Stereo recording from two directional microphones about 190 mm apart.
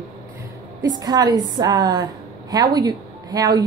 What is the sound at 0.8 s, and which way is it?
A woman's voice, 20° right (ahead or behind).